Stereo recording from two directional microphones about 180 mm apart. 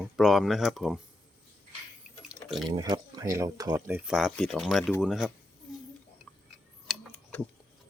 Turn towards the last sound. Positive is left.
turn(degrees=10)  # may be behind; listen again after turning